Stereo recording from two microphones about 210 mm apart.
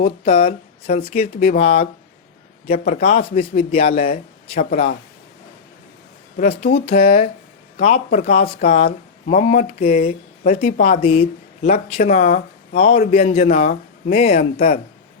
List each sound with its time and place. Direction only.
0.0 s speech: 25° left (ahead or behind)
2.6 s a man's voice: 45° left (ahead or behind)
3.0 s speech: 30° left (ahead or behind)
6.3 s speech: 35° left (ahead or behind)
13.4 s speech: 40° left (ahead or behind)